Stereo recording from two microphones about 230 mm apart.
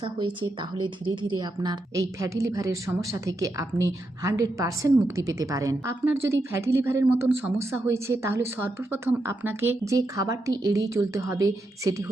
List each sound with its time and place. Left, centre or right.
0.0 s speech: right